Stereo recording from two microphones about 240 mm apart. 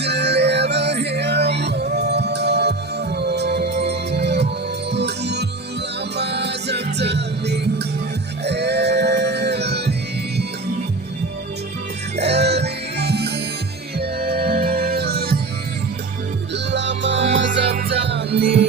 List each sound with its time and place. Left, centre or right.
0.0 s music: right
12.1 s music: right
16.7 s music: right